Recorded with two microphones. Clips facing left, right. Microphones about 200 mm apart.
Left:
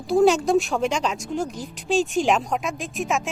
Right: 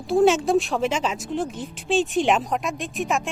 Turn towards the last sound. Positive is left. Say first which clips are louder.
# even
turn(degrees=0)  # may be behind; listen again after turning